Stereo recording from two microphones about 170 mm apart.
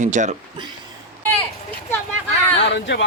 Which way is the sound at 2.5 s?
90° left.